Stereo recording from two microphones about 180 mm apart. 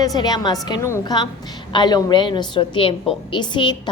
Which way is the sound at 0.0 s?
20° left (ahead or behind).